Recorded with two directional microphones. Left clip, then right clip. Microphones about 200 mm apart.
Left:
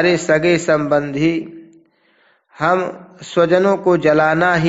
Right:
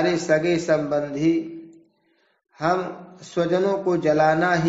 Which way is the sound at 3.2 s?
35° left (ahead or behind).